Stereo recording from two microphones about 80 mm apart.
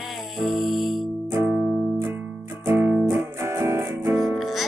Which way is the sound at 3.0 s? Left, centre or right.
Right.